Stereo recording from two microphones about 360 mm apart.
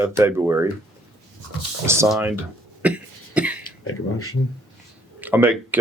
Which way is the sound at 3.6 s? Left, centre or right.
Left.